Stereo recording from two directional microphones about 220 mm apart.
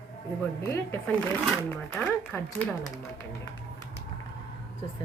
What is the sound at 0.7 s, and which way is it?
Speech, 10° left (ahead or behind).